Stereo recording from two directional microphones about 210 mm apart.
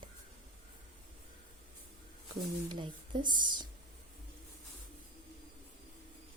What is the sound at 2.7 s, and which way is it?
Speech, 20° right (ahead or behind).